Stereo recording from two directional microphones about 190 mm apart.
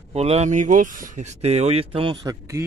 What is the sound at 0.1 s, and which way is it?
Speech, 35° right (ahead or behind).